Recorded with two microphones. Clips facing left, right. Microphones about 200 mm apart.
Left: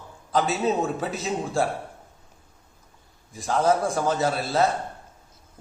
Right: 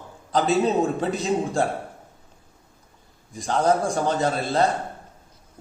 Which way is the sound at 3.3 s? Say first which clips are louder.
Right 1 dB; centre (ahead or behind).